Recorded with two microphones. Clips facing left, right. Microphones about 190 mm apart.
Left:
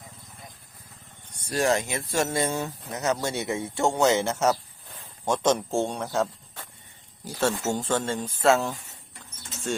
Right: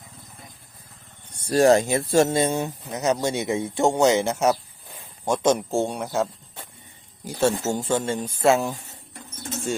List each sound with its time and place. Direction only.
1.5 s speech: 35° right (ahead or behind); by 8.7 s 15° right (ahead or behind)